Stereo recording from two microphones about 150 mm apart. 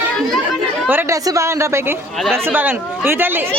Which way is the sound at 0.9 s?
15° right (ahead or behind).